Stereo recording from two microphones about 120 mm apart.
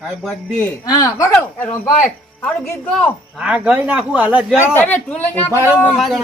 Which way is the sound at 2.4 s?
20° left (ahead or behind).